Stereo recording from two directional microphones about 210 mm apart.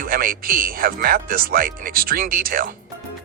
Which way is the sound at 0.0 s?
45° right (ahead or behind).